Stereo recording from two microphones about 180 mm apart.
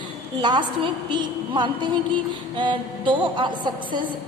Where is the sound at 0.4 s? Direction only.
25° right (ahead or behind).